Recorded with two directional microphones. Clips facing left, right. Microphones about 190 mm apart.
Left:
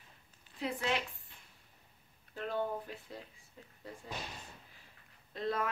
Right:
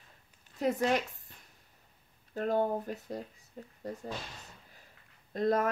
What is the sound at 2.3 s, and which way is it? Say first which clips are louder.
Speech: right 7 dB; 45° right (ahead or behind).